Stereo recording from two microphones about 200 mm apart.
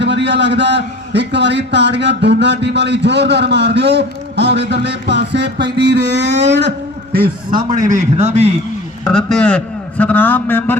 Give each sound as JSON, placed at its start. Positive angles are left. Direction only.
{"t": 0.0, "sound": "a man's voice", "side_deg": -60}
{"t": 9.0, "sound": "a man's voice", "side_deg": 5}